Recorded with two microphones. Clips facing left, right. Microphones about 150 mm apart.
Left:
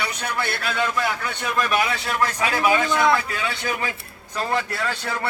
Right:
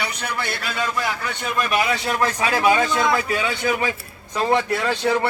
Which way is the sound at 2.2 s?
30° right (ahead or behind).